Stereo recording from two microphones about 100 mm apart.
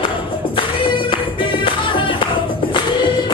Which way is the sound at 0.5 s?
60° left (ahead or behind).